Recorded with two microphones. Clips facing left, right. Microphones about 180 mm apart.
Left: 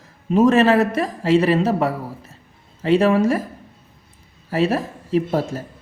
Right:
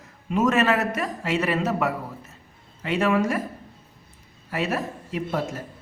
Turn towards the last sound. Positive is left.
turn(degrees=30)  # may be behind; listen again after turning